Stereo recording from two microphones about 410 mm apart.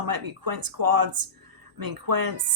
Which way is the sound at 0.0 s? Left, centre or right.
Right.